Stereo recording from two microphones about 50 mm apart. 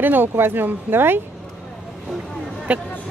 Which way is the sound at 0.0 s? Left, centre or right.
Right.